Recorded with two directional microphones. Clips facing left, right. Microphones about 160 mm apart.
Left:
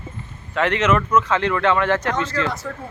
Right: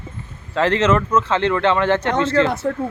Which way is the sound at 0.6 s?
30° right (ahead or behind).